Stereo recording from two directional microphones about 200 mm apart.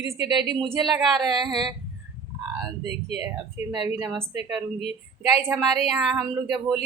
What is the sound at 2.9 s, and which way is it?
Speech, 30° left (ahead or behind).